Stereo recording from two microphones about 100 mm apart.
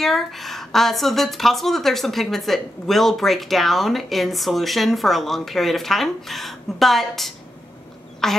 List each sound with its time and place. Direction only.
0.0 s speech: centre (ahead or behind)